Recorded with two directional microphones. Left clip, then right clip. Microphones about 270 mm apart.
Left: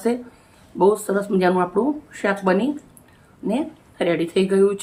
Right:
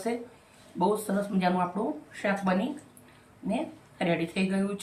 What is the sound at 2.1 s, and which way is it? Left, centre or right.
Speech, left.